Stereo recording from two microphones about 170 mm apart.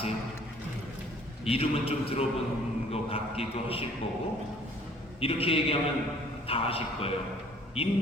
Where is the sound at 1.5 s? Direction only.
35° left (ahead or behind).